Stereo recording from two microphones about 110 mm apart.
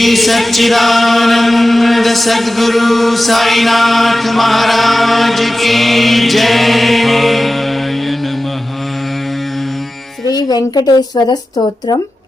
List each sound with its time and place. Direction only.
0.0 s chant: centre (ahead or behind)
10.2 s a woman's voice: 35° left (ahead or behind)